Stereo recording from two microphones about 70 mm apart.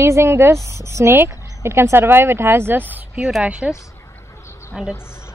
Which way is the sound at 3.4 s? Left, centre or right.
Centre.